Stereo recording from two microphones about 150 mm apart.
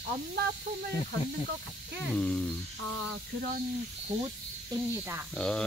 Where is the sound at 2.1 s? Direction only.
5° left (ahead or behind).